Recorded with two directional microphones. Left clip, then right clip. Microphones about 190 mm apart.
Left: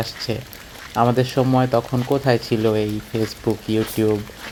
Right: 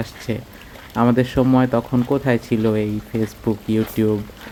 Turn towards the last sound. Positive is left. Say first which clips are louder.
# even
turn(degrees=-15)  # may be behind; listen again after turning